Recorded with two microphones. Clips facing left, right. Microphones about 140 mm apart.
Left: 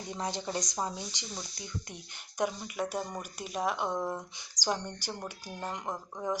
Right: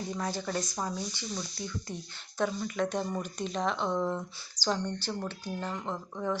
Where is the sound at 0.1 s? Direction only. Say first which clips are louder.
Left 1 dB; 20° left (ahead or behind).